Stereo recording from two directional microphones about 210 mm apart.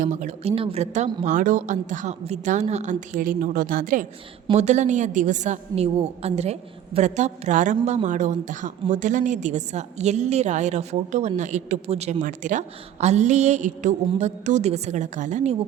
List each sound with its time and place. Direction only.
0.0 s a woman's voice: 35° right (ahead or behind)